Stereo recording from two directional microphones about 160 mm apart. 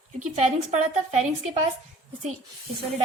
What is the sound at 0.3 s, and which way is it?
Speech, 50° right (ahead or behind).